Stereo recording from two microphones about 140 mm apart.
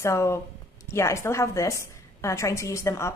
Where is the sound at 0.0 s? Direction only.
20° left (ahead or behind).